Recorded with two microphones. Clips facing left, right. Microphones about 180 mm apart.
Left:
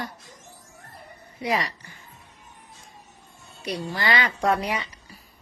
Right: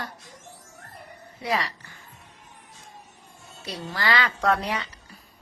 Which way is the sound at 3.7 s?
15° left (ahead or behind).